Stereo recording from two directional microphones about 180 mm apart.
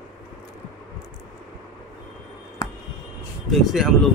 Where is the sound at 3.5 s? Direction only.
Centre (ahead or behind).